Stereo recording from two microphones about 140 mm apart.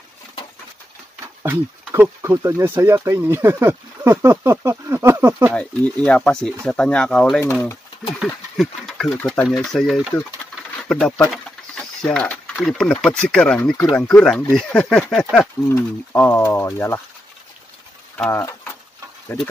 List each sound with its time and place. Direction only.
1.2 s speech: 15° right (ahead or behind)
5.5 s speech: 10° left (ahead or behind)
8.2 s speech: centre (ahead or behind)
15.7 s speech: 20° left (ahead or behind)
18.1 s a sound: 15° left (ahead or behind)
19.3 s speech: 15° left (ahead or behind)